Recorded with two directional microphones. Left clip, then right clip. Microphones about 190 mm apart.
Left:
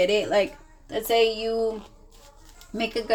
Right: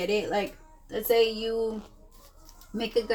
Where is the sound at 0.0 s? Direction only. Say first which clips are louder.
Left 6 dB; 40° left (ahead or behind).